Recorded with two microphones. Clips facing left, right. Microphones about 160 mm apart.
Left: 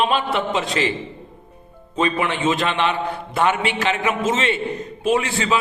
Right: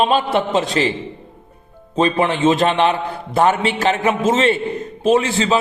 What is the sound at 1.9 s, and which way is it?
A man's voice, 35° right (ahead or behind).